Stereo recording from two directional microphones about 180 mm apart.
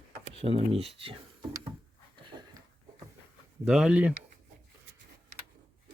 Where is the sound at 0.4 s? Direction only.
35° right (ahead or behind).